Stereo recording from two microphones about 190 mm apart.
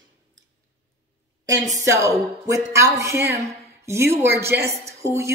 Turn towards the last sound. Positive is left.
turn(degrees=-15)  # may be behind; listen again after turning